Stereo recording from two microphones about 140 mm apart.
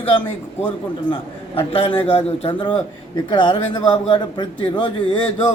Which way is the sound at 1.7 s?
45° left (ahead or behind).